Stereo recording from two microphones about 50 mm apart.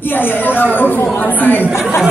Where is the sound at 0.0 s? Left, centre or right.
Left.